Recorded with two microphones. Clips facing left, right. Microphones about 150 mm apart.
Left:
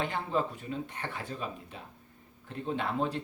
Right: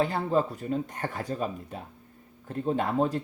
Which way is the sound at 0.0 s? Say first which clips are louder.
Right 6 dB; 40° right (ahead or behind).